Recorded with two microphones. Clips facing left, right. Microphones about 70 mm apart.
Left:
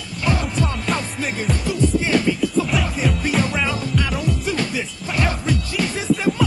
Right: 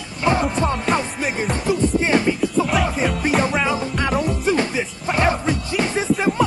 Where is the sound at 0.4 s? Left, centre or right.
Right.